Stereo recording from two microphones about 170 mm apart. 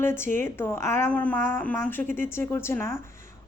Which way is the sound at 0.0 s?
15° left (ahead or behind).